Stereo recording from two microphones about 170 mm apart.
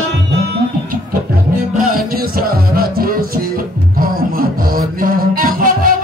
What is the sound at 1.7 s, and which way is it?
Music, 60° right (ahead or behind).